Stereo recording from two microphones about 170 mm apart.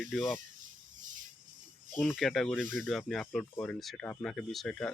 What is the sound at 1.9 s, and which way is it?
Speech, centre (ahead or behind).